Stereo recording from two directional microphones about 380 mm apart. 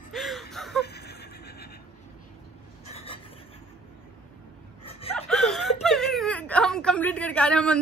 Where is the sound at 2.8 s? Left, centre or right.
Centre.